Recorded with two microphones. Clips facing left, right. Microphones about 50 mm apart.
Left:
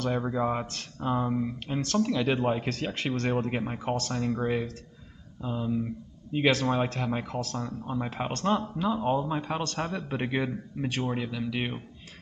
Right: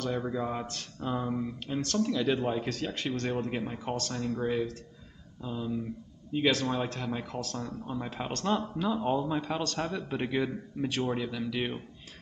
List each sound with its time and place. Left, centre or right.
0.2 s a man's voice: left
6.3 s a man's voice: left
8.5 s a man's voice: centre